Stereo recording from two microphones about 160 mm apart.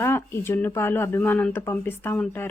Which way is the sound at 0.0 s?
15° left (ahead or behind).